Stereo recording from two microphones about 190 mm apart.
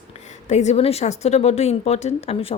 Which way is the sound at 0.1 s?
40° left (ahead or behind).